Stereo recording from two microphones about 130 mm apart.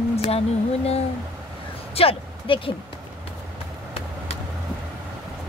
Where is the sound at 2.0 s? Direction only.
45° left (ahead or behind).